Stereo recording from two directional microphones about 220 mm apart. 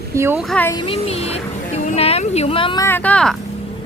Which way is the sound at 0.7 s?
25° left (ahead or behind).